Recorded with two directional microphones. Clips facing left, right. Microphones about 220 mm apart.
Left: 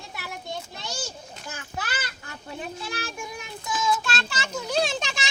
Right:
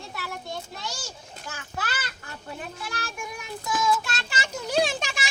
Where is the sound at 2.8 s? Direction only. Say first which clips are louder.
Left 2 dB; 20° left (ahead or behind).